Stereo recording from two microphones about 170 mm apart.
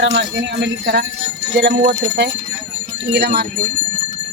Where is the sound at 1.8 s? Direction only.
50° right (ahead or behind).